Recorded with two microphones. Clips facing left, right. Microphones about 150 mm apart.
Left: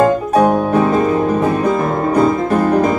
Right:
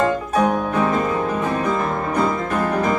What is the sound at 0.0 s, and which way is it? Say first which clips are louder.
Piano: left 6 dB; 35° left (ahead or behind).